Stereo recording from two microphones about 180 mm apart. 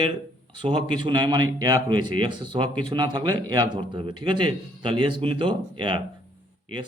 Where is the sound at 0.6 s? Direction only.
25° right (ahead or behind).